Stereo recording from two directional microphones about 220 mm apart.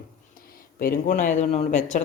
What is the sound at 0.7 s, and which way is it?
Speech, 35° left (ahead or behind).